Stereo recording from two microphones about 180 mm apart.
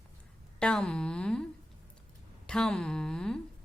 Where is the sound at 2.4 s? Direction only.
5° left (ahead or behind).